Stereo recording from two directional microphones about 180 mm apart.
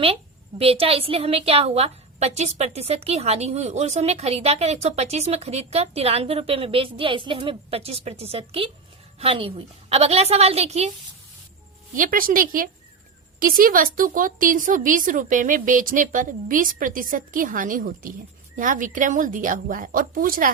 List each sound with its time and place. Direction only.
0.6 s a woman's voice: 30° right (ahead or behind)
11.9 s a woman's voice: 50° right (ahead or behind)